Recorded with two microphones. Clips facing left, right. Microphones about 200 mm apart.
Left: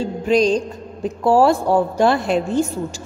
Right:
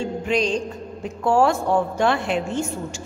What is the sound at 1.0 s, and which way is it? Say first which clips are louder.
A woman's voice: left 4 dB; 35° left (ahead or behind).